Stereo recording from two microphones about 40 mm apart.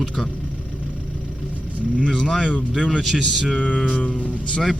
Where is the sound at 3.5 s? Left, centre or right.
Left.